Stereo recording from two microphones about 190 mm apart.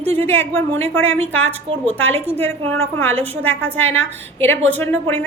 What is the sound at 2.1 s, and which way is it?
Speech, 35° right (ahead or behind).